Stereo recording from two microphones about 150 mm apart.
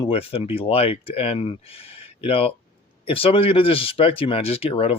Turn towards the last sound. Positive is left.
turn(degrees=40)  # may be behind; listen again after turning